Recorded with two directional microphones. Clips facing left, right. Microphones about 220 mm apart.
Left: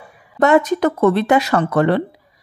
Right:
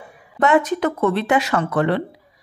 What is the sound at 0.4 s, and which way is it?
Speech, 40° left (ahead or behind).